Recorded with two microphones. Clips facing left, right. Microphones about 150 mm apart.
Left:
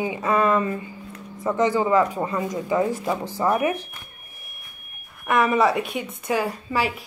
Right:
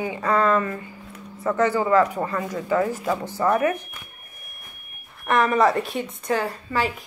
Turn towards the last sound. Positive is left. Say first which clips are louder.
# even
turn(degrees=10)  # may be behind; listen again after turning